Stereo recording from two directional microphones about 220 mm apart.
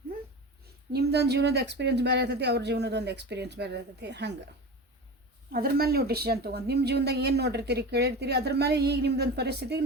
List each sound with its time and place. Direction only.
0.9 s speech: 50° right (ahead or behind)
5.5 s speech: 45° right (ahead or behind)